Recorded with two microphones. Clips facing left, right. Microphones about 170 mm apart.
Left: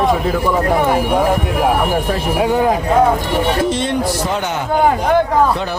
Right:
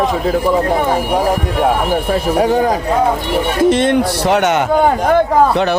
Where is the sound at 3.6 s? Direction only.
55° right (ahead or behind).